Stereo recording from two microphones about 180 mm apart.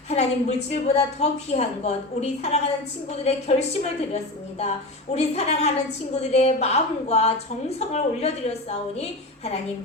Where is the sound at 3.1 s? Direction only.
35° left (ahead or behind).